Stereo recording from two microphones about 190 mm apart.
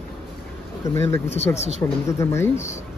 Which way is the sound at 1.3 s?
35° left (ahead or behind).